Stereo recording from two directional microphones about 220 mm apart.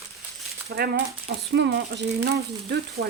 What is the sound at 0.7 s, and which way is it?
Speech, 45° right (ahead or behind).